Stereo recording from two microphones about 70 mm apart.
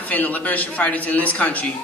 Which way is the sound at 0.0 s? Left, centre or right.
Left.